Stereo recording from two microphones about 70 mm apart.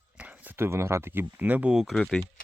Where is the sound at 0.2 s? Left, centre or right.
Right.